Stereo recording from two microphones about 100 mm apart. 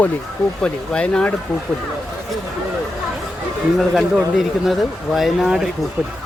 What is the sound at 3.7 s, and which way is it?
Speech, centre (ahead or behind).